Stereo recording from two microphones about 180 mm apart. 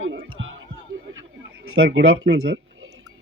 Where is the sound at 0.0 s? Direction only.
90° right.